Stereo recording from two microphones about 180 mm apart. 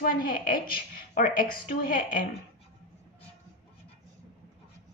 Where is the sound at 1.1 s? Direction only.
50° left (ahead or behind).